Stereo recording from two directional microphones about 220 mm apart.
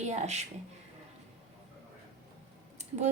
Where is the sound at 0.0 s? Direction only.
30° right (ahead or behind).